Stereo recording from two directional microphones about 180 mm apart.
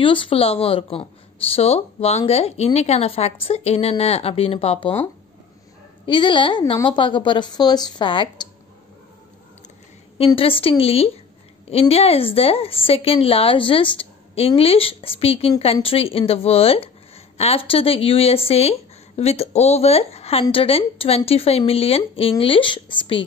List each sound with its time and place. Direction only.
0.0 s a woman's voice: 30° left (ahead or behind)
6.0 s a woman's voice: 25° left (ahead or behind)
10.1 s a woman's voice: 30° left (ahead or behind)